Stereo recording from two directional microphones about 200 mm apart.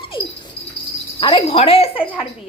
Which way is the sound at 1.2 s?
25° left (ahead or behind).